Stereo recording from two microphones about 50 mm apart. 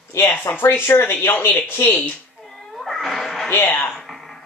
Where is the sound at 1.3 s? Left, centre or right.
Left.